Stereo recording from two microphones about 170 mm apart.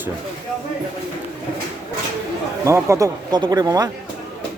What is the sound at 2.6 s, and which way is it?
Speech, 15° right (ahead or behind).